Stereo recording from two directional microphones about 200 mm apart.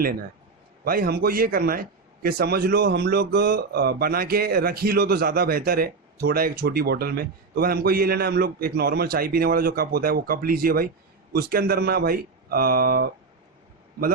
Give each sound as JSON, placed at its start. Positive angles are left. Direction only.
{"t": 0.9, "sound": "a man's voice", "side_deg": -50}